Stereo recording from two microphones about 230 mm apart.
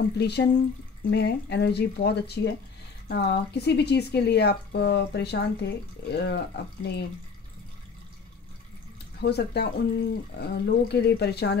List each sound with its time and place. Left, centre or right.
0.2 s speech: left
9.2 s speech: left